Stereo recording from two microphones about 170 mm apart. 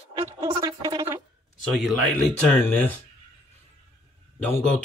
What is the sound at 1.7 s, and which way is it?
Speech, centre (ahead or behind).